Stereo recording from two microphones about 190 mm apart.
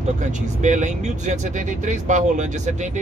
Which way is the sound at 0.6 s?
40° right (ahead or behind).